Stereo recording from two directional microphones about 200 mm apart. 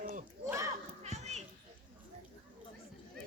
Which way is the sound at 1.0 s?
35° right (ahead or behind).